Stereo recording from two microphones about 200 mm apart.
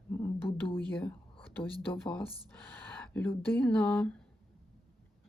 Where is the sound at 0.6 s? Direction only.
25° left (ahead or behind).